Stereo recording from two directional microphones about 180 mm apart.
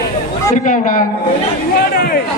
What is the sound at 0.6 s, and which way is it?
Speech, 45° left (ahead or behind).